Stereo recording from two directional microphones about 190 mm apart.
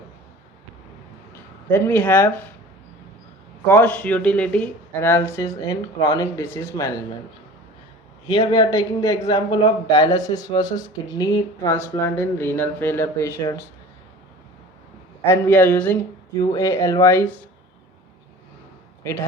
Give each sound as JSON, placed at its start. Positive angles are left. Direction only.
{"t": 1.7, "sound": "speech", "side_deg": 10}
{"t": 3.7, "sound": "speech", "side_deg": 10}
{"t": 8.3, "sound": "a man's voice", "side_deg": 20}
{"t": 15.2, "sound": "speech", "side_deg": 10}